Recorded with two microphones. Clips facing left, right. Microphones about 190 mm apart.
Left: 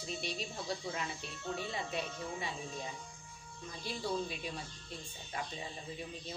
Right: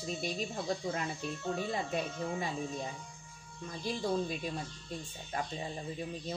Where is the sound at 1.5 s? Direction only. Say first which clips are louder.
Right 3 dB; 45° right (ahead or behind).